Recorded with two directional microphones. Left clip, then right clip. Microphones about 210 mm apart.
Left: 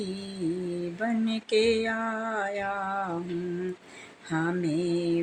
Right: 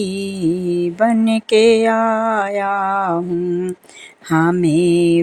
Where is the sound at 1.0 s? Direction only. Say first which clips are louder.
Right 14 dB; 50° right (ahead or behind).